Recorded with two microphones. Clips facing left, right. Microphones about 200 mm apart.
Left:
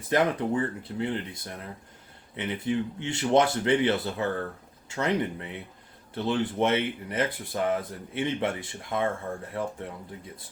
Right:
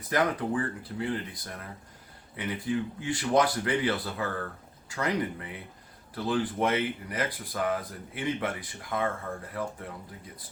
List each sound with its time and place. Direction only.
0.1 s speech: 25° left (ahead or behind)